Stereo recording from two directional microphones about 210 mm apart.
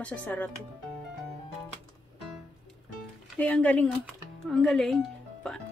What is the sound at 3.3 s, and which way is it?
Speech, 5° left (ahead or behind).